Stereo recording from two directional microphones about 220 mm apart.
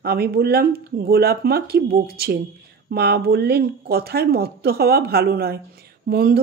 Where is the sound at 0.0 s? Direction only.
45° right (ahead or behind).